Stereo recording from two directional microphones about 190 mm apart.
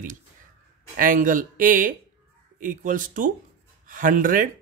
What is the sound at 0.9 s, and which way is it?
Speech, 45° right (ahead or behind).